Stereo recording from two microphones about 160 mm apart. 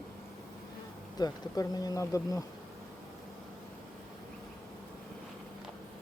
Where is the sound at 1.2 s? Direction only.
25° left (ahead or behind).